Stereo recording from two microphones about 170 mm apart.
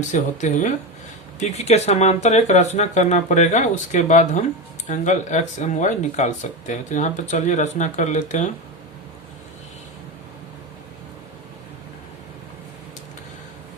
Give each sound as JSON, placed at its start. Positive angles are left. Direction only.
{"t": 0.1, "sound": "speech", "side_deg": 45}